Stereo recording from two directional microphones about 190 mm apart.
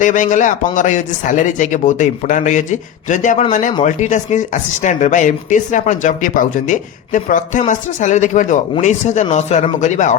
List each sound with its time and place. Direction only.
0.0 s speech: 40° left (ahead or behind)